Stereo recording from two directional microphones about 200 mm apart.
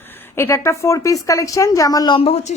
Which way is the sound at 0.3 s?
15° left (ahead or behind).